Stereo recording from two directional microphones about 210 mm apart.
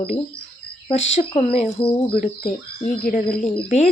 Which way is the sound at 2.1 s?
40° left (ahead or behind).